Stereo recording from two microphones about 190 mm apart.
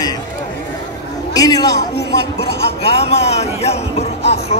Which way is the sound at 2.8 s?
35° left (ahead or behind).